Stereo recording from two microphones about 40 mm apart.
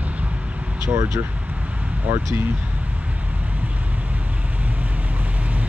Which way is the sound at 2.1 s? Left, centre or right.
Right.